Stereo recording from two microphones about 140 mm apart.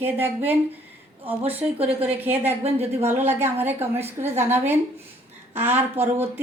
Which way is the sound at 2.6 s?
45° right (ahead or behind).